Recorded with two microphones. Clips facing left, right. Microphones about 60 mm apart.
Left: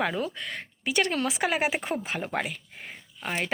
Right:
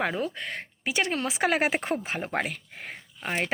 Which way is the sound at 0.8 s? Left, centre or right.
Right.